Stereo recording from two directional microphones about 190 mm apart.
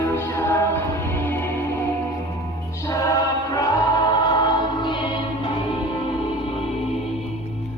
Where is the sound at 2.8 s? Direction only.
15° left (ahead or behind).